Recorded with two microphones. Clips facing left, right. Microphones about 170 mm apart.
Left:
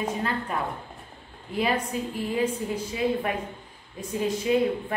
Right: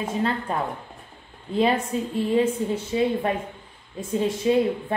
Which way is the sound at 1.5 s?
30° right (ahead or behind).